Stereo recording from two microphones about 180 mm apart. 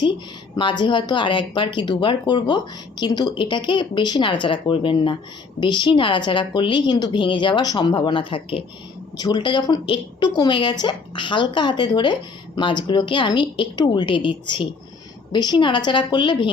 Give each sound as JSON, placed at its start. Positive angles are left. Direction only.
{"t": 0.5, "sound": "a woman's voice", "side_deg": 25}